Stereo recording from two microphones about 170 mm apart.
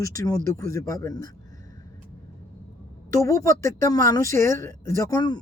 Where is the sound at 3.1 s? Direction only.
20° left (ahead or behind).